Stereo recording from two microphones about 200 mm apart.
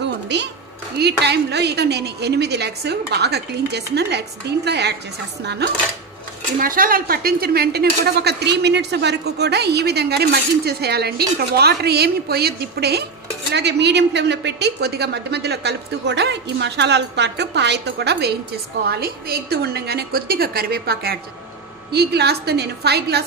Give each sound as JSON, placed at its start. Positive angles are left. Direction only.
{"t": 0.0, "sound": "a sound", "side_deg": -60}
{"t": 0.9, "sound": "a woman's voice", "side_deg": -55}
{"t": 6.6, "sound": "a woman's voice", "side_deg": -45}